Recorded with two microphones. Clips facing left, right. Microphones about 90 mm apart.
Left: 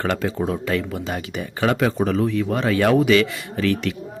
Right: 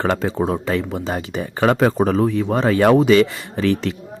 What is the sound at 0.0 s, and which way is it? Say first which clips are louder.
Speech: right 3 dB; 30° right (ahead or behind).